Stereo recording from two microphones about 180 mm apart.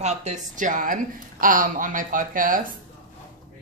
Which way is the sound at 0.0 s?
40° right (ahead or behind).